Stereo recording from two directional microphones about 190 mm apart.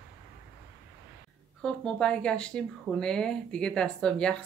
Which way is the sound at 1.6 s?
5° left (ahead or behind).